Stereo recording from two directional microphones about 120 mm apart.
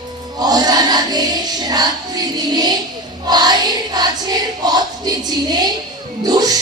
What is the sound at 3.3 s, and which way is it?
Choir, 35° right (ahead or behind).